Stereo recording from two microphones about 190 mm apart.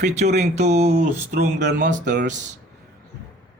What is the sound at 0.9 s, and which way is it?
Speech, 60° right (ahead or behind).